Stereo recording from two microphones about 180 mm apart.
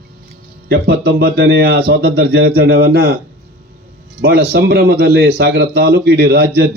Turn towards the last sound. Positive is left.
turn(degrees=-65)  # may be behind; listen again after turning